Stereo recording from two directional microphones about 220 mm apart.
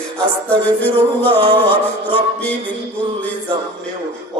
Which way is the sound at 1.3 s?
20° right (ahead or behind).